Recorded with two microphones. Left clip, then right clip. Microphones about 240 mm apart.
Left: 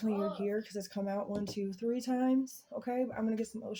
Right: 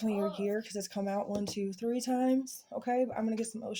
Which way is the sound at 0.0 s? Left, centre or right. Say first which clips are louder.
Right 2 dB; right.